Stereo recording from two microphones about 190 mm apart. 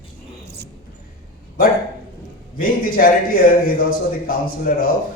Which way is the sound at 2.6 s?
50° left (ahead or behind).